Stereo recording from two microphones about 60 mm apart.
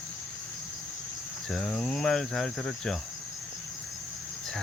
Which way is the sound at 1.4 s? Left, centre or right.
Centre.